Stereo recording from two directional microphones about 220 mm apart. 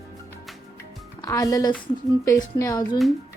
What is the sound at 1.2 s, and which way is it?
Speech, 15° left (ahead or behind).